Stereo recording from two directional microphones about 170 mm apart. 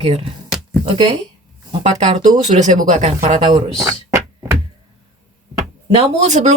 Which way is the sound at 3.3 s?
25° right (ahead or behind).